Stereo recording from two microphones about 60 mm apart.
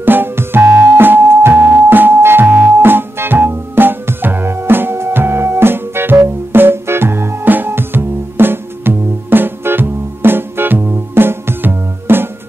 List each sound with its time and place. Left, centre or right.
0.0 s music: right